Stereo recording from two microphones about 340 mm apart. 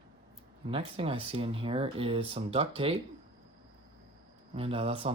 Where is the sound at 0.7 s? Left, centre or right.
Centre.